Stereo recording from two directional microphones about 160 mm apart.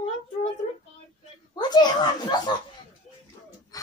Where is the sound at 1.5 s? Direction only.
25° left (ahead or behind).